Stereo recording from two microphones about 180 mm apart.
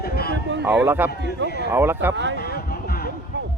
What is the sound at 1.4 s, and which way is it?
Speech, 60° left (ahead or behind).